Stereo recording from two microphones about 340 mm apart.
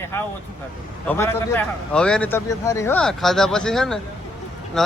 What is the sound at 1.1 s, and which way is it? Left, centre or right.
A man's voice, centre.